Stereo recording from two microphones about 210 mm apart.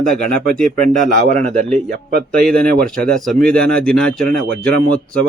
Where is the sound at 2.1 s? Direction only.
45° right (ahead or behind).